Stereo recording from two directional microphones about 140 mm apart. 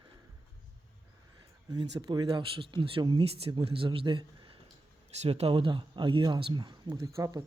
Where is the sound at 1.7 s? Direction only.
30° right (ahead or behind).